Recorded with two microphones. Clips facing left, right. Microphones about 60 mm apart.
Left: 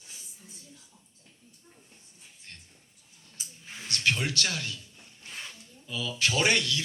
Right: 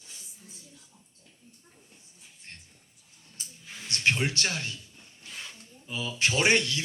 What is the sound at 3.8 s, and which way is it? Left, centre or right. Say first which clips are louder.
Speech: right 2 dB; right.